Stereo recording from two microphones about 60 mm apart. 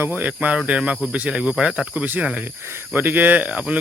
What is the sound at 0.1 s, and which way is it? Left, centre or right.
Speech, right.